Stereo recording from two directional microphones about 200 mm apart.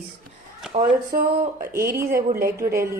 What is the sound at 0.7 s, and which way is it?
A woman's voice, 40° right (ahead or behind).